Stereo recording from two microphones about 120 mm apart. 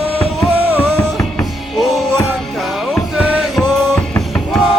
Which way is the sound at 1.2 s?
Centre (ahead or behind).